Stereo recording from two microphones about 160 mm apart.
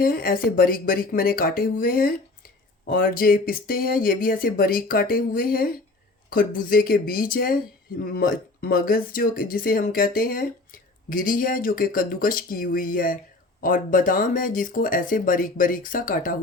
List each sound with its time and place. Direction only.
0.0 s speech: 65° left (ahead or behind)